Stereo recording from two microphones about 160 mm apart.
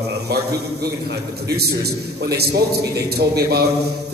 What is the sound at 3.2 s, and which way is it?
Speech, 90° right.